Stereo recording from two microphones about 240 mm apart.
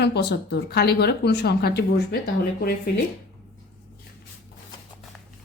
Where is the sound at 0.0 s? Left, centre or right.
Left.